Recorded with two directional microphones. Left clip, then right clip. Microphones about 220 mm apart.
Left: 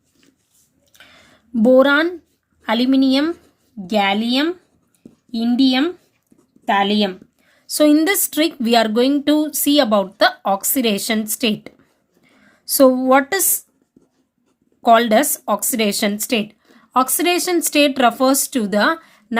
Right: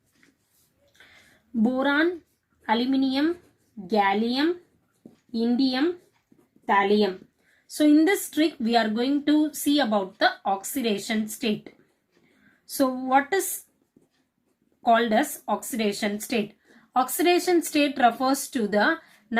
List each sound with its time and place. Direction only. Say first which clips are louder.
1.6 s a woman's voice: left 11 dB; 55° left (ahead or behind)
14.8 s speech: left 8 dB; 55° left (ahead or behind)